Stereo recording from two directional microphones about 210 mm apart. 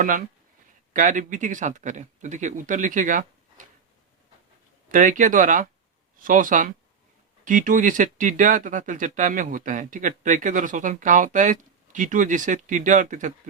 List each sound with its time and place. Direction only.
0.0 s speech: 40° right (ahead or behind)
4.9 s speech: 40° right (ahead or behind)